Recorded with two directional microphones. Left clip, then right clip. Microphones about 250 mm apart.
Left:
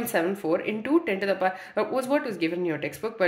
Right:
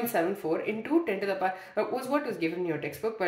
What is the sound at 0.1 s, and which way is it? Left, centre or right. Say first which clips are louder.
Speech: left 6 dB; left.